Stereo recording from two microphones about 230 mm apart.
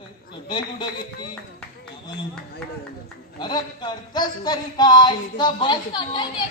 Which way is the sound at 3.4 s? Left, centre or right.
Centre.